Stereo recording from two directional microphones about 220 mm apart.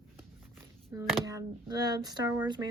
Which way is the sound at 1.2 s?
15° right (ahead or behind).